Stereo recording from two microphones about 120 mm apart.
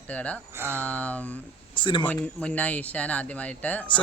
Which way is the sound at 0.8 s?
10° left (ahead or behind).